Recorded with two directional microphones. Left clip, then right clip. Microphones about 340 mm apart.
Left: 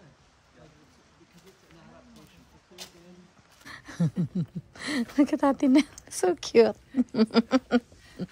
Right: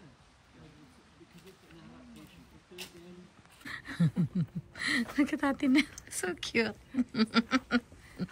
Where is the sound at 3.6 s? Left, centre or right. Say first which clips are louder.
Left 1 dB; centre.